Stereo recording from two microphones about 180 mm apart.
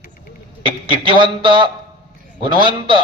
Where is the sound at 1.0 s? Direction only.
25° right (ahead or behind).